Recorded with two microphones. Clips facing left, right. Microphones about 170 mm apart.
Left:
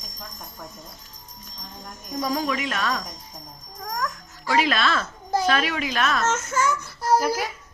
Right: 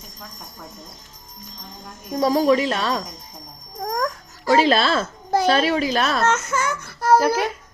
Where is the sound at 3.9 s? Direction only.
35° right (ahead or behind).